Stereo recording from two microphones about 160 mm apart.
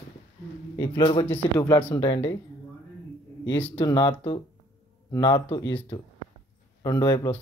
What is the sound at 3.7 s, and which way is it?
Speech, 30° left (ahead or behind).